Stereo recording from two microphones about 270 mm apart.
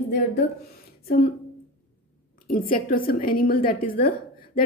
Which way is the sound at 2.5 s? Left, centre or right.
Left.